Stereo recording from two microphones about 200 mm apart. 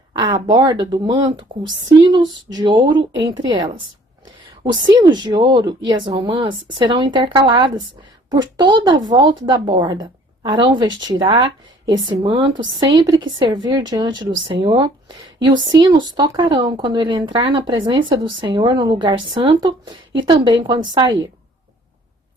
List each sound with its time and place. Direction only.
0.1 s a woman's voice: 20° right (ahead or behind)
4.7 s a woman's voice: 20° right (ahead or behind)